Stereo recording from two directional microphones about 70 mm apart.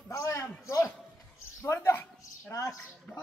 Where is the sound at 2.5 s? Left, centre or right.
Left.